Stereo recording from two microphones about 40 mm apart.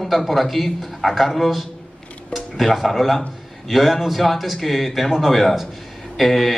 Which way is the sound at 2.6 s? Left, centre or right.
Centre.